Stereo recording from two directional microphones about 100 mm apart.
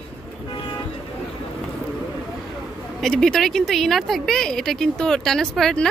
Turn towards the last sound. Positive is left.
turn(degrees=5)  # may be behind; listen again after turning